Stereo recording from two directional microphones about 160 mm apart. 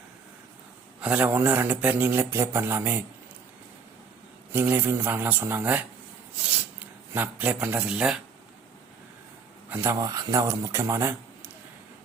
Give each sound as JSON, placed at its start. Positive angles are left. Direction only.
{"t": 1.0, "sound": "a man's voice", "side_deg": -10}
{"t": 4.5, "sound": "a man's voice", "side_deg": -15}
{"t": 9.6, "sound": "speech", "side_deg": -15}